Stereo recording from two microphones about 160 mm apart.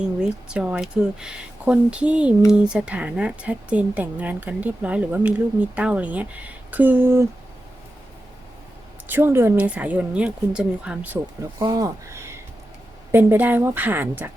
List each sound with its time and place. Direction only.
0.0 s speech: 5° right (ahead or behind)
9.0 s speech: 15° right (ahead or behind)
11.6 s speech: 20° right (ahead or behind)